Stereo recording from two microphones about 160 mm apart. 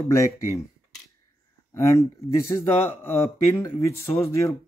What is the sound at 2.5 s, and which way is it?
Speech, 15° left (ahead or behind).